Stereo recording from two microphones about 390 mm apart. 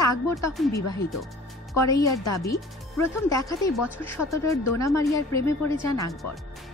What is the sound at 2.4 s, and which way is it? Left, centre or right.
Speech, centre.